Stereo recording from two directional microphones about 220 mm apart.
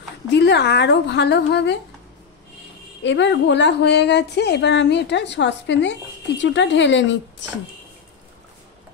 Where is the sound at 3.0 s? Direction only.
55° left (ahead or behind).